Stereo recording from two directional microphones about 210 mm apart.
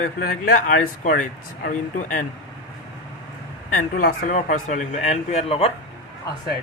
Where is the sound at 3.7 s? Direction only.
40° left (ahead or behind).